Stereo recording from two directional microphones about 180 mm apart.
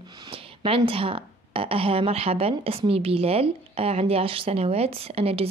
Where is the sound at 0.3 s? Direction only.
30° right (ahead or behind).